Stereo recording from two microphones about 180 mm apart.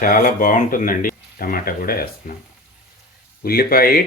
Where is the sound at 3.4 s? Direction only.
55° left (ahead or behind).